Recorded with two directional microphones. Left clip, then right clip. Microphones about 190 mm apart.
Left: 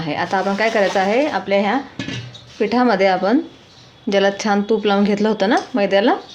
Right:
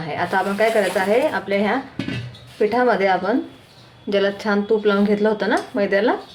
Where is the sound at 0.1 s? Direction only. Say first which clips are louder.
Left 2 dB; 45° left (ahead or behind).